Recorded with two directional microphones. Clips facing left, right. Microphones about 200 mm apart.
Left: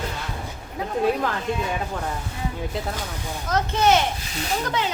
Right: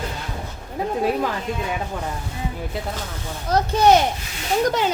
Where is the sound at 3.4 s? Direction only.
35° right (ahead or behind).